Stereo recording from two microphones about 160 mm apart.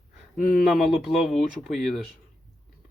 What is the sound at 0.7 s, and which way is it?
Speech, centre (ahead or behind).